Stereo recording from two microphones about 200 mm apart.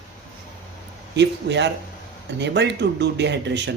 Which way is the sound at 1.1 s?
60° right (ahead or behind).